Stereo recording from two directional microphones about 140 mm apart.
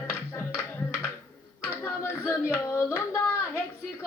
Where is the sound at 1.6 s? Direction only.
15° left (ahead or behind).